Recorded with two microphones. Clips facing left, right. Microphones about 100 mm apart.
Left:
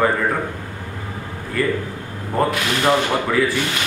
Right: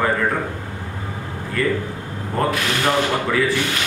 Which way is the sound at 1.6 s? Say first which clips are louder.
Even; 5° left (ahead or behind).